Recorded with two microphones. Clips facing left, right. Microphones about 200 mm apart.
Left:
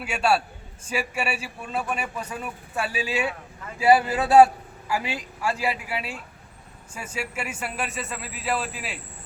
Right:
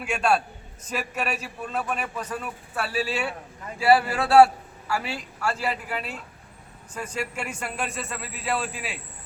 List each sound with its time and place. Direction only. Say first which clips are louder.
0.0 s a man's voice: even; 5° left (ahead or behind)